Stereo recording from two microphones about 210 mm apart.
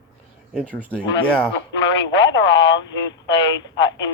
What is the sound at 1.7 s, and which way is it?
Speech, 60° left (ahead or behind).